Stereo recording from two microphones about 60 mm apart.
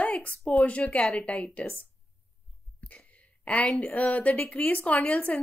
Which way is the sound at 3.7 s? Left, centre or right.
Left.